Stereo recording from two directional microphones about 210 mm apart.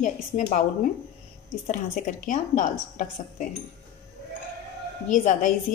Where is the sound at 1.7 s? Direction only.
35° left (ahead or behind).